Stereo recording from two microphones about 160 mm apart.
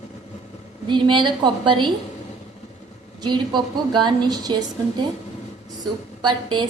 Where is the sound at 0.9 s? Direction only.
30° right (ahead or behind).